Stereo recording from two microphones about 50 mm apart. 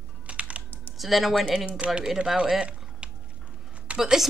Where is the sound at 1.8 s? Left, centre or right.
Centre.